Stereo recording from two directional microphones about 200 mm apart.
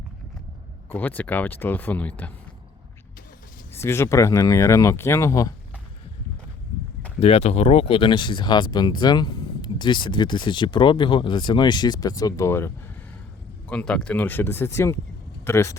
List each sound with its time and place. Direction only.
0.9 s speech: 10° left (ahead or behind)
3.8 s speech: 15° left (ahead or behind)
7.2 s speech: 30° left (ahead or behind); by 15.8 s 15° left (ahead or behind)